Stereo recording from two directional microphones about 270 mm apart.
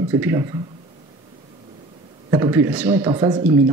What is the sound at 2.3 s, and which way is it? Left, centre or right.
Speech, centre.